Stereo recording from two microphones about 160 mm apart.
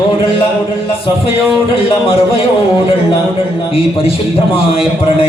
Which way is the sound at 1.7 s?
35° left (ahead or behind).